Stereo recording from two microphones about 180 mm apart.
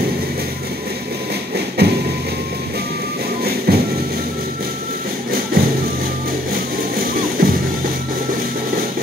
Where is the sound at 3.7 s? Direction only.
60° right (ahead or behind).